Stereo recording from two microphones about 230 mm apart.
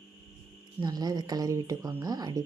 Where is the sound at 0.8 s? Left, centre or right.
Centre.